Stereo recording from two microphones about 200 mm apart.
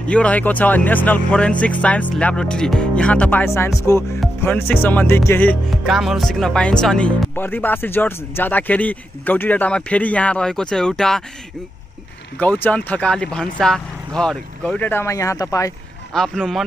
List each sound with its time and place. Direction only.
0.0 s music: 5° left (ahead or behind)
12.4 s music: 10° left (ahead or behind)
16.1 s speech: centre (ahead or behind)